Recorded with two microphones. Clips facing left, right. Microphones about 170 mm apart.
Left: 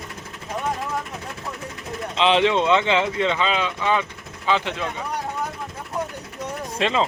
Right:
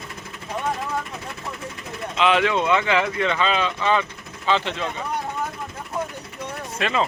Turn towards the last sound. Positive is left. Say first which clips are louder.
# left 2 dB
turn(degrees=20)  # may be behind; listen again after turning